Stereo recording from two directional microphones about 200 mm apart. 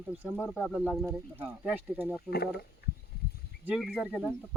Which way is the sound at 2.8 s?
55° left (ahead or behind).